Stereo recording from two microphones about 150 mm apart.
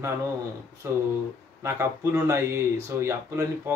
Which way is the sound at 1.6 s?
20° right (ahead or behind).